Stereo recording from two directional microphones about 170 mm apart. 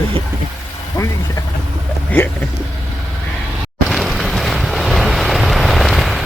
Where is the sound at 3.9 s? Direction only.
Centre (ahead or behind).